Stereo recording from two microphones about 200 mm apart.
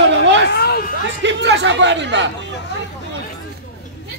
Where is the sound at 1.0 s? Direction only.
65° right (ahead or behind).